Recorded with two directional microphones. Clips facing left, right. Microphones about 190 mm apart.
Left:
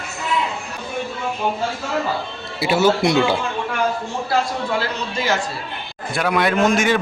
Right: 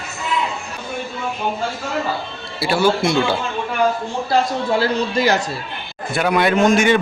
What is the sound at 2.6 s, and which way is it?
Speech, 20° left (ahead or behind).